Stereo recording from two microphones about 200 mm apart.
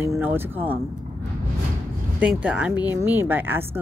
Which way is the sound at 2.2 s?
5° right (ahead or behind).